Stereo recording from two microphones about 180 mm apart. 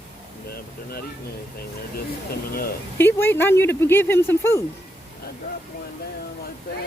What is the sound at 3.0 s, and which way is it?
Speech, 10° left (ahead or behind).